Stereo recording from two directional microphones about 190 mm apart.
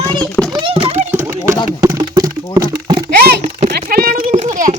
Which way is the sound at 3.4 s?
30° right (ahead or behind).